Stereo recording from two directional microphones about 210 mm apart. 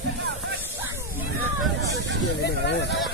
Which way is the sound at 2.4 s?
55° left (ahead or behind).